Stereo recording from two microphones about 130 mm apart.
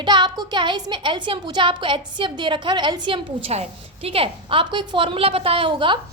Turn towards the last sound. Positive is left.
turn(degrees=-40)  # may be behind; listen again after turning